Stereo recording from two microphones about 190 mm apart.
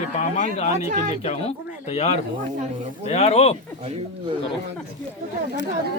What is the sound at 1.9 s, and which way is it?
Speech, 35° left (ahead or behind).